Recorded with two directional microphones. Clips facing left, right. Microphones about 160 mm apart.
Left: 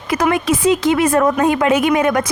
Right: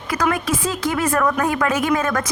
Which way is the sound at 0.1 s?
20° left (ahead or behind).